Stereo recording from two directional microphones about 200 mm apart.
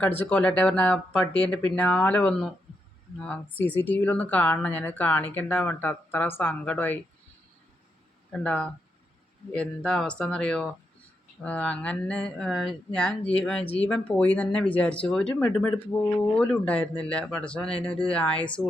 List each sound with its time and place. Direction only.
0.0 s speech: 10° left (ahead or behind)
8.3 s speech: 5° left (ahead or behind)
15.9 s speech: 15° left (ahead or behind)
16.4 s speech: 5° left (ahead or behind)